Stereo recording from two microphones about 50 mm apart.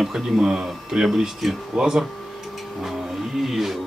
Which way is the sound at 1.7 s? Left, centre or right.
Centre.